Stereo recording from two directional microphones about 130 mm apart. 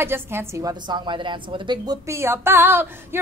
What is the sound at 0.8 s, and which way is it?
A woman's voice, 35° right (ahead or behind).